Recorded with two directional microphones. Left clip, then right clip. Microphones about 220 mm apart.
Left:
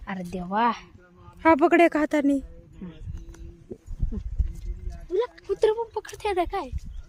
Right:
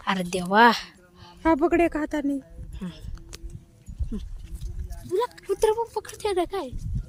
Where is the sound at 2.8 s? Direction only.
40° right (ahead or behind).